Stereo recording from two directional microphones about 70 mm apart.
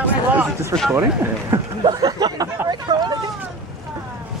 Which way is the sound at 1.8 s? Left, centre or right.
Right.